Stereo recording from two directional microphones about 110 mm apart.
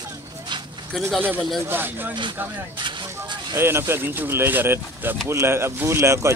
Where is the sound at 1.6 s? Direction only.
20° right (ahead or behind).